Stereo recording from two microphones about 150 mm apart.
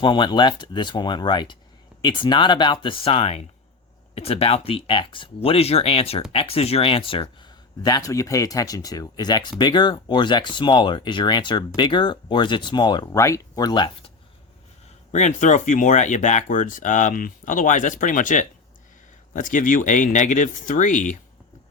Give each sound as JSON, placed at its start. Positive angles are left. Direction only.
{"t": 0.0, "sound": "speech", "side_deg": 30}
{"t": 15.1, "sound": "speech", "side_deg": 50}